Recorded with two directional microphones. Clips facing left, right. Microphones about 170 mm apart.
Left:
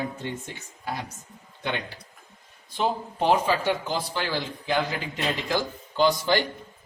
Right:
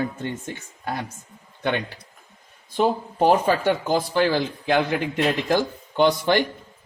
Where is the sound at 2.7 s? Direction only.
45° right (ahead or behind).